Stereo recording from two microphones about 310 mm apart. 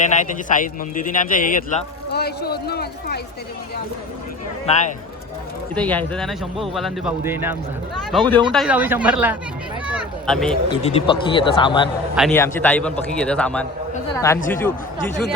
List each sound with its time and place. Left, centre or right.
0.1 s speech: left
4.6 s speech: left
5.7 s speech: centre
9.8 s a sound: centre
10.7 s speech: centre
12.1 s speech: centre